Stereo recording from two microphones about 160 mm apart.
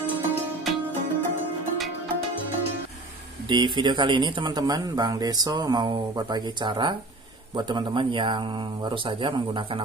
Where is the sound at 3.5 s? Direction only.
30° right (ahead or behind).